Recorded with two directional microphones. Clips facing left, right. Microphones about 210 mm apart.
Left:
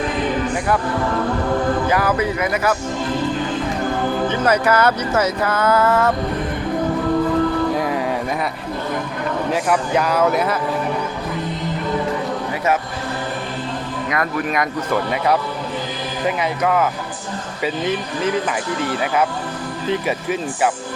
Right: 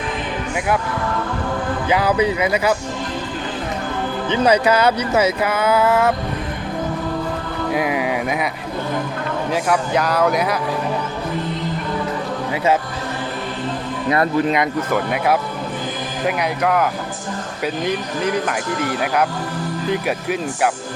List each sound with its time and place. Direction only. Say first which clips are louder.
2.0 s speech: right 2 dB; 15° right (ahead or behind)
4.3 s speech: right 4 dB; 15° right (ahead or behind)
7.7 s a sound: even; 10° right (ahead or behind)
9.5 s speech: even; 5° left (ahead or behind)
14.1 s speech: right 5 dB; 30° right (ahead or behind)
14.8 s speech: right 1 dB; 5° right (ahead or behind)
19.9 s speech: left 1 dB; centre (ahead or behind)